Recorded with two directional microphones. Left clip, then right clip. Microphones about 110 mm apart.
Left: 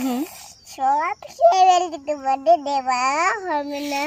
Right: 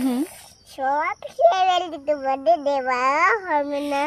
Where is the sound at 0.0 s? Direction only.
25° right (ahead or behind).